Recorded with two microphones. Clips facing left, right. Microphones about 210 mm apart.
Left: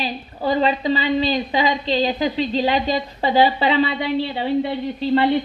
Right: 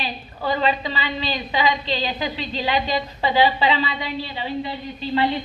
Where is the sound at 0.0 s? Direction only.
40° left (ahead or behind).